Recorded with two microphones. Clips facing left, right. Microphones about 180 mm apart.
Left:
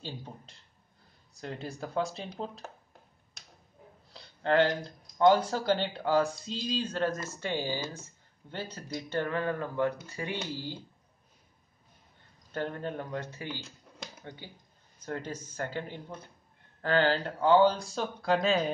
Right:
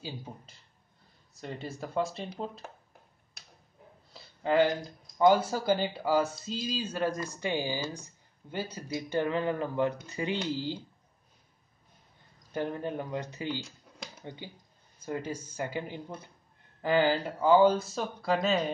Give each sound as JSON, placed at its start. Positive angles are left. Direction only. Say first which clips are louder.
{"t": 0.0, "sound": "speech", "louder": "right 1 dB", "side_deg": -5}
{"t": 4.1, "sound": "speech", "louder": "even", "side_deg": -5}
{"t": 12.5, "sound": "speech", "louder": "right 2 dB", "side_deg": -10}